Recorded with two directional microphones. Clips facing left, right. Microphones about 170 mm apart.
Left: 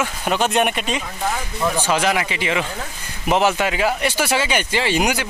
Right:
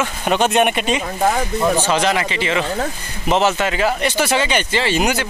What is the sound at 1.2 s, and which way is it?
Speech, 50° right (ahead or behind).